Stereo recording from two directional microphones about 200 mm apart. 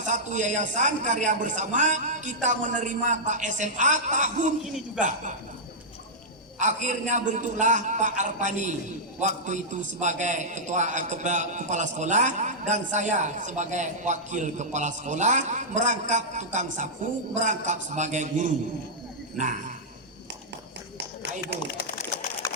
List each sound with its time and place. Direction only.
0.0 s a man's voice: 40° right (ahead or behind)
6.6 s a man's voice: 35° right (ahead or behind)